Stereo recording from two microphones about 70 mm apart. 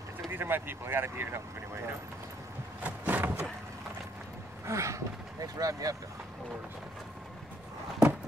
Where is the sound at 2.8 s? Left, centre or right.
Right.